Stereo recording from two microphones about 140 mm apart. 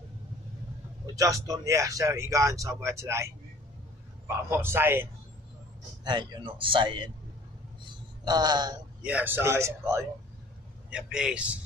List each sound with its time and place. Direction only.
1.1 s a man's voice: 25° right (ahead or behind)
6.0 s a man's voice: 30° right (ahead or behind)
8.3 s speech: 30° right (ahead or behind)
9.0 s a man's voice: 10° right (ahead or behind)
10.9 s a man's voice: 5° right (ahead or behind)